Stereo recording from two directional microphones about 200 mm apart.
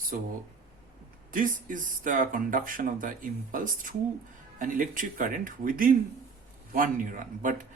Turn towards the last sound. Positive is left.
turn(degrees=-40)  # may be behind; listen again after turning